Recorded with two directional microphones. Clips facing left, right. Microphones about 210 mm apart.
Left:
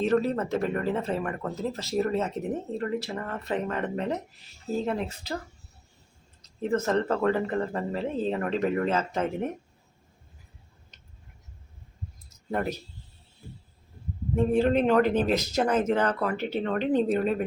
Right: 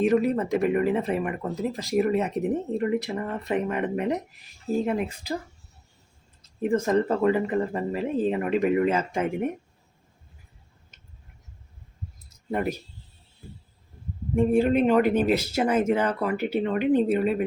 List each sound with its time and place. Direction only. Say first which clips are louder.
0.0 s speech: right 3 dB; 15° right (ahead or behind)
6.6 s speech: right 3 dB; 10° right (ahead or behind)
12.5 s speech: right 2 dB; 10° right (ahead or behind)
14.3 s speech: right 2 dB; 10° right (ahead or behind)